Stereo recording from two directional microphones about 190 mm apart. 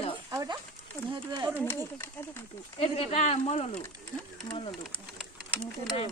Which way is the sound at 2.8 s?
30° left (ahead or behind).